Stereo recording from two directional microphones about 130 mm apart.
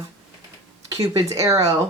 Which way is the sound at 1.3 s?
25° right (ahead or behind).